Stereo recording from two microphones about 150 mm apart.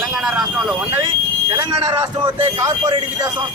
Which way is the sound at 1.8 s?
35° right (ahead or behind).